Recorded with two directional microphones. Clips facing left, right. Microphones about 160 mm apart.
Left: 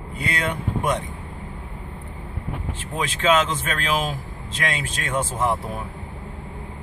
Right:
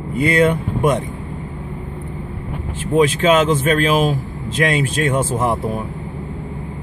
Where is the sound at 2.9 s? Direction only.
15° right (ahead or behind).